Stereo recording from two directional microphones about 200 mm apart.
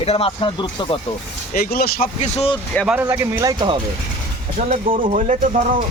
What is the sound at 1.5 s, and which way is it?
Speech, 45° left (ahead or behind).